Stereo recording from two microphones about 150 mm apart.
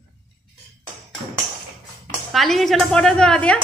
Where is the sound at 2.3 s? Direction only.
Centre (ahead or behind).